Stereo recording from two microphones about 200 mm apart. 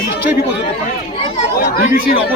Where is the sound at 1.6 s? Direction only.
45° left (ahead or behind).